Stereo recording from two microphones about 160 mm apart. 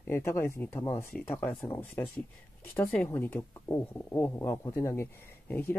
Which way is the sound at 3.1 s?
10° left (ahead or behind).